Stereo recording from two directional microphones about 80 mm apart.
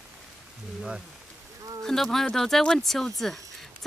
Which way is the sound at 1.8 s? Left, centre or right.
Centre.